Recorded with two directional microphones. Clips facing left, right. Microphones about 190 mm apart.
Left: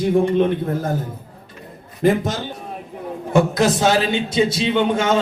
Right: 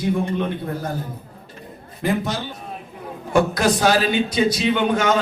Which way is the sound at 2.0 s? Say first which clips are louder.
Left 5 dB; 45° left (ahead or behind).